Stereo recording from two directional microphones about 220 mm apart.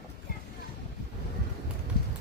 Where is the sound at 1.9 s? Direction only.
45° left (ahead or behind).